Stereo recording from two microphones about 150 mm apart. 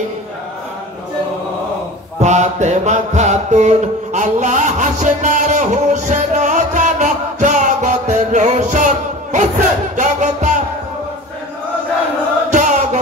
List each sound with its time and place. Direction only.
2.1 s mantra: 50° right (ahead or behind)
12.4 s music: 55° right (ahead or behind)